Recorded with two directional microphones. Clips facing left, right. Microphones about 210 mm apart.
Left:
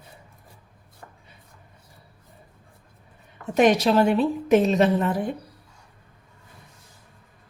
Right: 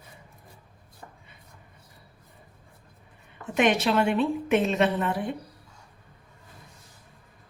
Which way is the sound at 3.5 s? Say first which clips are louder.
Left 5 dB; 40° left (ahead or behind).